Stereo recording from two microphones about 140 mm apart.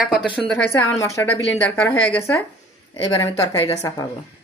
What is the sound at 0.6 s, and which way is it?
A woman's voice, 15° left (ahead or behind).